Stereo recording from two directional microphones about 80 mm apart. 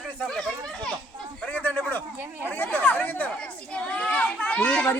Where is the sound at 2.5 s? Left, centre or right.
Left.